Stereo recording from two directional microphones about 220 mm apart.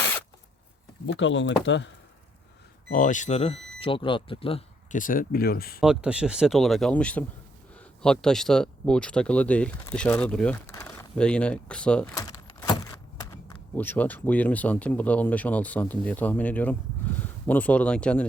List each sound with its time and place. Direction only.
1.0 s speech: 55° left (ahead or behind)
2.9 s speech: 35° left (ahead or behind)
5.8 s speech: 5° right (ahead or behind)
12.1 s a sound: 15° left (ahead or behind)
13.7 s speech: 10° left (ahead or behind)